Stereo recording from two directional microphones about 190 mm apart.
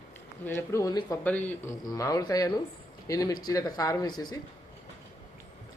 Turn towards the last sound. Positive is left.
turn(degrees=20)  # may be behind; listen again after turning